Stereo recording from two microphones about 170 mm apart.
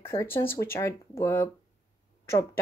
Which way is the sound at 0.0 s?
15° left (ahead or behind).